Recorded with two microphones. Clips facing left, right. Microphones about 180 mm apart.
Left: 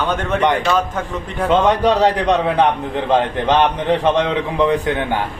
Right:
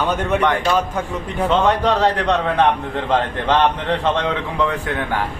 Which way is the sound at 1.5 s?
15° left (ahead or behind).